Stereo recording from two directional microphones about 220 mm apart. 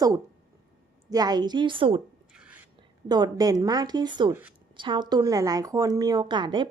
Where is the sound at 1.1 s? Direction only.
20° right (ahead or behind).